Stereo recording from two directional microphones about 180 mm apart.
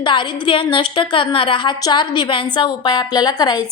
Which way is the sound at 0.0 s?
25° left (ahead or behind).